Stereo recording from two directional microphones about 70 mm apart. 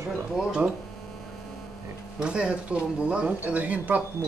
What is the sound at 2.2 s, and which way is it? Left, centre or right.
Speech, centre.